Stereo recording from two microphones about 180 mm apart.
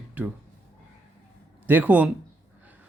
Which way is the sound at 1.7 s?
10° right (ahead or behind).